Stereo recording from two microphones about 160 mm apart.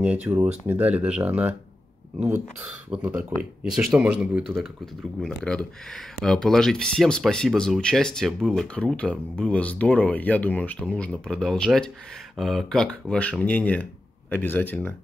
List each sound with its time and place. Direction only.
0.0 s speech: 10° right (ahead or behind)
5.2 s speech: 5° left (ahead or behind)